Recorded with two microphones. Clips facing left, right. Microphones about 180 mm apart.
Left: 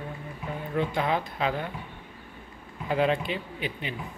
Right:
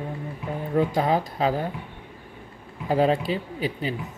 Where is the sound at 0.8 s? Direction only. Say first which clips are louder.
Right 5 dB; 40° right (ahead or behind).